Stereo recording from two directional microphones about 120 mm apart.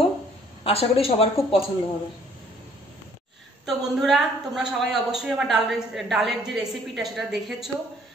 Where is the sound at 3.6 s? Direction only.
Centre (ahead or behind).